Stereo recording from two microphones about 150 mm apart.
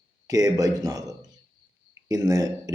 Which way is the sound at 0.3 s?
25° right (ahead or behind).